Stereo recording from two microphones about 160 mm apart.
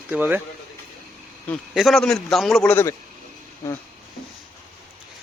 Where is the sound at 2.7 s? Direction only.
15° left (ahead or behind).